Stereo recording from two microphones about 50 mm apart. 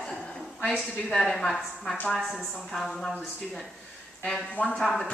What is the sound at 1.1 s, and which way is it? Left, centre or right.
A woman's voice, centre.